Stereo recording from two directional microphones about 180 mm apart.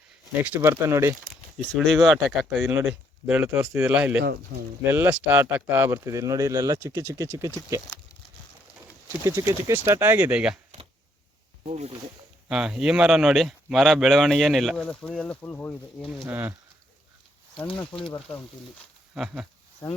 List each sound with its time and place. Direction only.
0.4 s speech: 10° right (ahead or behind)
1.7 s speech: centre (ahead or behind); by 7.5 s 15° right (ahead or behind)
9.2 s speech: 15° right (ahead or behind)
11.6 s speech: 40° right (ahead or behind)
12.5 s speech: 5° right (ahead or behind)
16.2 s speech: 10° right (ahead or behind)
19.1 s speech: 5° right (ahead or behind)
19.8 s speech: 25° left (ahead or behind)